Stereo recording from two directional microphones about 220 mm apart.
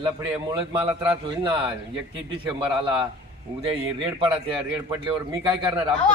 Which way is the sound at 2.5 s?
20° right (ahead or behind).